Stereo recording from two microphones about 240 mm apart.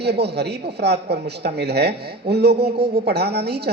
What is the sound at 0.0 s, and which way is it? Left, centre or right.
Speech, right.